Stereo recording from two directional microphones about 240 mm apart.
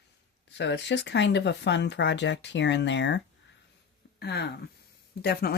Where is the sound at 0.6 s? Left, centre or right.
Left.